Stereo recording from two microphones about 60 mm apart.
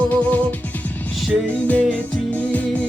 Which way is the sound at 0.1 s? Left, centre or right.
Left.